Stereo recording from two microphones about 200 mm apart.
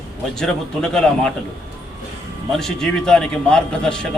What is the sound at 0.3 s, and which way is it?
Speech, 5° left (ahead or behind).